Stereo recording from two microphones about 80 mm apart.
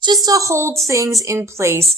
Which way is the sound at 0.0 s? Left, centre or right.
Right.